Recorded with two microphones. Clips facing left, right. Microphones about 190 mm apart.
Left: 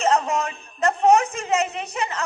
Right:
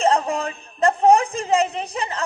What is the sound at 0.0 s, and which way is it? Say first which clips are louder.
A man's voice: right 1 dB; 35° right (ahead or behind).